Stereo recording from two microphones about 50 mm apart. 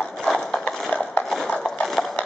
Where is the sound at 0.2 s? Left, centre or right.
Centre.